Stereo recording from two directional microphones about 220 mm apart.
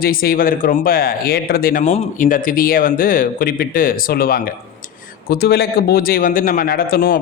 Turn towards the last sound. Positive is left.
turn(degrees=40)  # may be behind; listen again after turning